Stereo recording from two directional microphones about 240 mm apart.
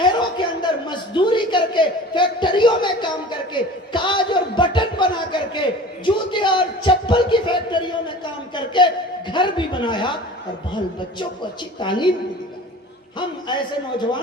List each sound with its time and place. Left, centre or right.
0.0 s a sound: centre
9.3 s speech: centre
11.8 s a woman's voice: centre
13.5 s a woman's voice: centre